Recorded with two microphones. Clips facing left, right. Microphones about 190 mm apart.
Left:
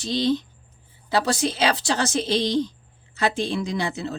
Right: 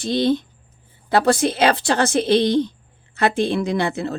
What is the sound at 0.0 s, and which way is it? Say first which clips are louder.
A woman's voice: right 4 dB; 55° right (ahead or behind).